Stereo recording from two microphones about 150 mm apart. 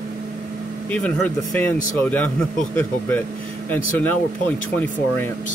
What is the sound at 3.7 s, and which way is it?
Speech, 10° left (ahead or behind).